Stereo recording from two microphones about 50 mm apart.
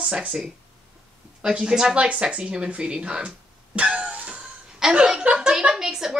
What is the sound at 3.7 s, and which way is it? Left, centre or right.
Music, right.